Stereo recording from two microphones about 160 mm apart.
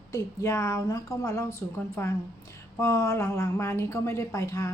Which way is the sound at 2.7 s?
15° left (ahead or behind).